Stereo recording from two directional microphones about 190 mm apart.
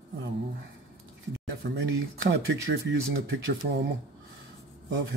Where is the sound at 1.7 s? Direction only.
70° right (ahead or behind).